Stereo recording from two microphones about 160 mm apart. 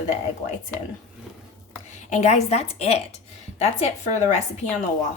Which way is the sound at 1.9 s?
50° left (ahead or behind).